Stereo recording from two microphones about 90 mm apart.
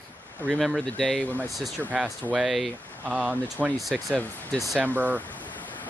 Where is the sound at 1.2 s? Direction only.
20° right (ahead or behind).